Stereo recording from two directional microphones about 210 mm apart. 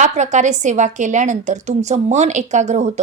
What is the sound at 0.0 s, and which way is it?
A woman's voice, 35° right (ahead or behind).